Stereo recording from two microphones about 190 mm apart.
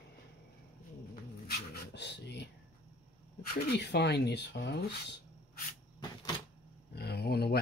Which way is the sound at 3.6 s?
65° left (ahead or behind).